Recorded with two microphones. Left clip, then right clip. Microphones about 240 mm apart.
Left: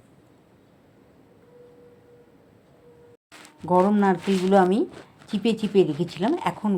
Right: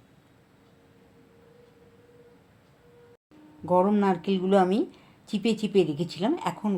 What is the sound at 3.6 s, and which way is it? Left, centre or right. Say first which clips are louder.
Speech: left 3 dB; centre.